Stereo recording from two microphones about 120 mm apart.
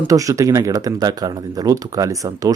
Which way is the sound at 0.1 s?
30° right (ahead or behind).